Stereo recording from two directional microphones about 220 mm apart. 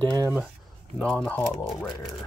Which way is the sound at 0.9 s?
5° left (ahead or behind).